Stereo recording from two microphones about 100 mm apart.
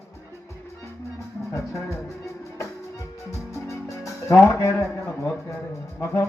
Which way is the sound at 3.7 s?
30° left (ahead or behind).